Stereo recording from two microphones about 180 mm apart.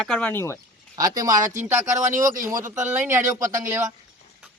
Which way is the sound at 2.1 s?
45° right (ahead or behind).